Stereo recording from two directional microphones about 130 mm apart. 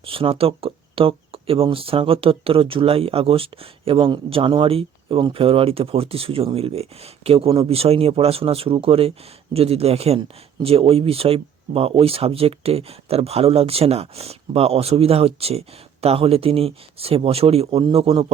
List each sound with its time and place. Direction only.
0.0 s speech: 45° right (ahead or behind)